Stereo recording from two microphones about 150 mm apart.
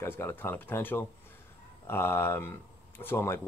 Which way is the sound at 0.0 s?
15° left (ahead or behind).